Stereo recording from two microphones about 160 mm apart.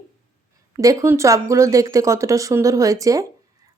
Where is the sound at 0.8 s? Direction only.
20° right (ahead or behind).